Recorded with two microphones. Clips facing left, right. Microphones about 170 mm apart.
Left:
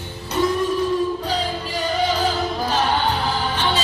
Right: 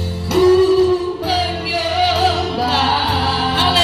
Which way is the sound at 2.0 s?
70° right (ahead or behind).